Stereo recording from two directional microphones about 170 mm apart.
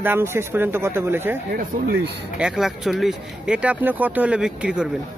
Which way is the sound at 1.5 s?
65° right (ahead or behind).